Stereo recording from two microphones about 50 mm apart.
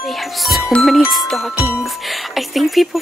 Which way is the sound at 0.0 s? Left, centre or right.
Centre.